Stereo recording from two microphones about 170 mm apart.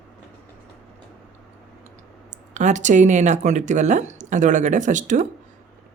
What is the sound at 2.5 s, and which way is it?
Speech, 45° right (ahead or behind).